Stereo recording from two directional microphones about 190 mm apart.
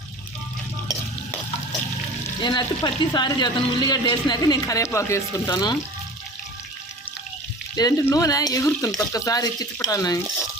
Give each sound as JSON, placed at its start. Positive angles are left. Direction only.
{"t": 2.4, "sound": "speech", "side_deg": 25}
{"t": 7.8, "sound": "speech", "side_deg": 20}